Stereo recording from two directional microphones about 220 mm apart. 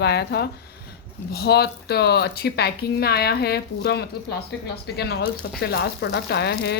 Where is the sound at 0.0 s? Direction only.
50° left (ahead or behind).